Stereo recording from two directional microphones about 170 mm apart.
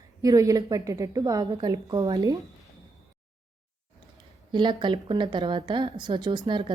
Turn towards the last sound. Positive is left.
turn(degrees=-30)  # may be behind; listen again after turning